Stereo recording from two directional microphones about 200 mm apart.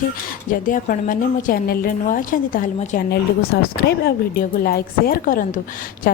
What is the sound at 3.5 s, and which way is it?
A woman's voice, 60° left (ahead or behind).